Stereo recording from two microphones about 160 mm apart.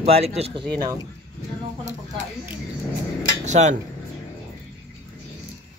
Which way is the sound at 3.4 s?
45° right (ahead or behind).